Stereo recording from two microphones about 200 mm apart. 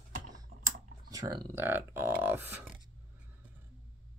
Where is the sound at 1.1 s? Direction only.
20° right (ahead or behind).